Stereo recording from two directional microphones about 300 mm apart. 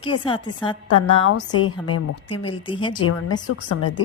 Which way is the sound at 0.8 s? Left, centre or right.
Left.